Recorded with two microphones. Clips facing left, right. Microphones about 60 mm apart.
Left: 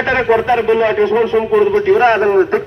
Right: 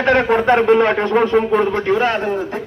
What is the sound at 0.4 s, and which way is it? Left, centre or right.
Speech, right.